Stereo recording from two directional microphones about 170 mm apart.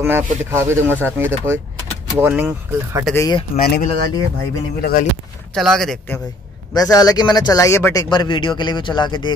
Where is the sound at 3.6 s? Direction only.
65° left (ahead or behind).